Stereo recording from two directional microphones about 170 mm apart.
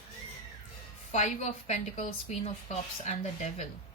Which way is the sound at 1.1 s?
40° left (ahead or behind).